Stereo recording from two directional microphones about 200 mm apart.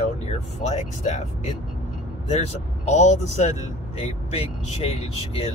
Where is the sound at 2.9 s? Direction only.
35° left (ahead or behind).